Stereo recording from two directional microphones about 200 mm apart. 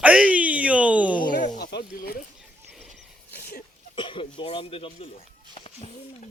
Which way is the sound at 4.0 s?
25° left (ahead or behind).